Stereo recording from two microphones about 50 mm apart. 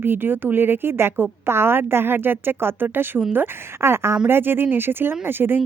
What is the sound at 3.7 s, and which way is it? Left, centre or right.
A woman's voice, right.